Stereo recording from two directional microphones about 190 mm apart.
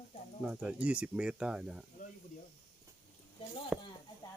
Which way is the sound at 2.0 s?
45° left (ahead or behind).